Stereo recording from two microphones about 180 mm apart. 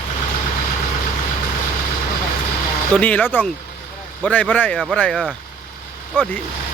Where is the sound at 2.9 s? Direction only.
10° left (ahead or behind).